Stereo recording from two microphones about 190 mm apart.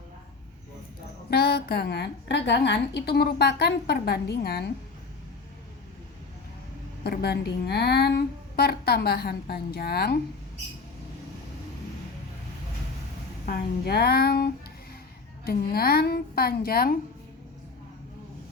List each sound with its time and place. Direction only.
1.3 s a woman's voice: 55° left (ahead or behind)
7.0 s a woman's voice: 60° left (ahead or behind)
13.4 s a woman's voice: 55° left (ahead or behind)